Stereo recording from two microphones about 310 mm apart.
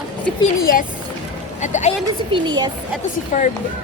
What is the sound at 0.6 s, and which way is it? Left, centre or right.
Speech, left.